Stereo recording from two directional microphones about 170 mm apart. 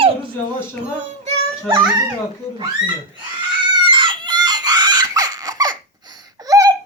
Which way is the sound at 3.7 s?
30° right (ahead or behind).